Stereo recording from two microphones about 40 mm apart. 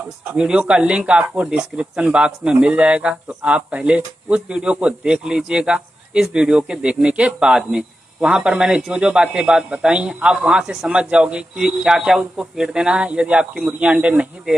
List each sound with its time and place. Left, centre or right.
0.4 s speech: right
6.8 s a man's voice: right; by 10.9 s centre
10.9 s speech: right
11.5 s speech: centre
14.0 s speech: right